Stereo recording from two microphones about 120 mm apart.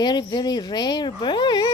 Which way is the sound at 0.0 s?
35° left (ahead or behind).